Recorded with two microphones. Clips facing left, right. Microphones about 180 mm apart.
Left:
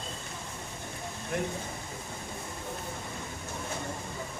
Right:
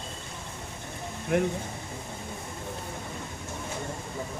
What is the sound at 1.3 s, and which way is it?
Speech, 65° right (ahead or behind).